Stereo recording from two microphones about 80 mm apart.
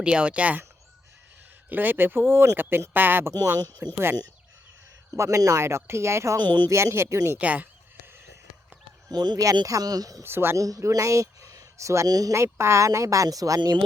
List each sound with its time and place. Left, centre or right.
0.0 s speech: centre
1.7 s speech: right
3.6 s speech: right
3.9 s speech: right
5.1 s speech: right
6.4 s speech: right
6.7 s speech: right
7.3 s fowl: centre
9.0 s speech: right
10.2 s speech: right
10.6 s speech: right
12.3 s speech: right
13.6 s speech: right